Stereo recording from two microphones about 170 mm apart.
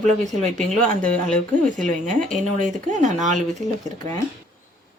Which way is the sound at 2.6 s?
45° right (ahead or behind).